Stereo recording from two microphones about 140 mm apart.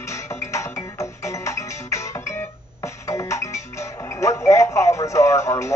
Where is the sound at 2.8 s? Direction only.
20° left (ahead or behind).